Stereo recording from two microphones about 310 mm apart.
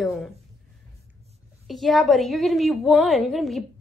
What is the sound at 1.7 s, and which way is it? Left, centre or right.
Speech, centre.